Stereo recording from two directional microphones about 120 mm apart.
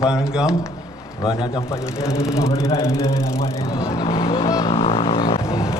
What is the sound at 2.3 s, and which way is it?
Speech, 25° left (ahead or behind).